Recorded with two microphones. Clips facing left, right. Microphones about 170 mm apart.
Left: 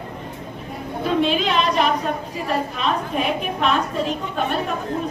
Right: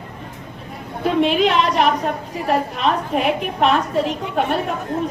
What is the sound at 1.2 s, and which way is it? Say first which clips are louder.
Speech: right 5 dB; 70° right (ahead or behind).